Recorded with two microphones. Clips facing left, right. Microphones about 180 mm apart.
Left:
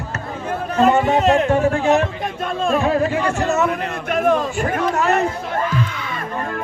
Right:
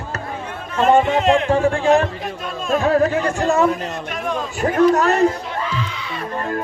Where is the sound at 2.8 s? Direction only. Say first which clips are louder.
Right 6 dB; 35° right (ahead or behind).